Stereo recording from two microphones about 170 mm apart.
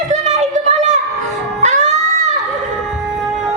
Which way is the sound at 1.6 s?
45° right (ahead or behind).